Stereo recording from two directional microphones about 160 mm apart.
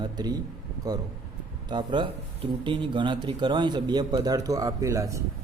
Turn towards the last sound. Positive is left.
turn(degrees=-20)  # may be behind; listen again after turning